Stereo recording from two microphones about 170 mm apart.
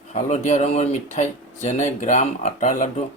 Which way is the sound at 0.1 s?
40° left (ahead or behind).